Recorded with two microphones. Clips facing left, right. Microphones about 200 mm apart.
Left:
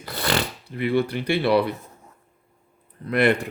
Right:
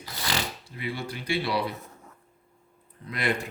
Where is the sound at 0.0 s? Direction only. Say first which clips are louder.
Left 7 dB; 60° left (ahead or behind).